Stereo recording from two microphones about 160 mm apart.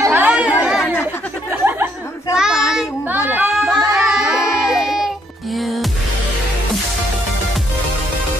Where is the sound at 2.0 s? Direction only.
15° left (ahead or behind).